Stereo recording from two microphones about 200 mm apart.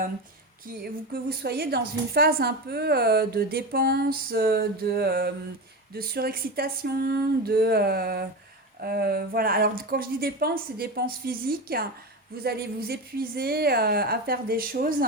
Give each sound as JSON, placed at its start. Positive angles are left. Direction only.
{"t": 1.1, "sound": "a woman's voice", "side_deg": -50}